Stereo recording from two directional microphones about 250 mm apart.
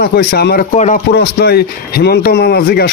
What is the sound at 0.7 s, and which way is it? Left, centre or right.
Speech, left.